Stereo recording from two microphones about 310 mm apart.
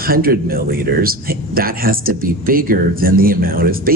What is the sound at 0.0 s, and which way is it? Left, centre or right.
A man's voice, right.